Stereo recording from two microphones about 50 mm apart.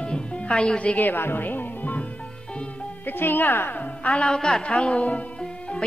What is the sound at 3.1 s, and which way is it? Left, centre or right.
Speech, left.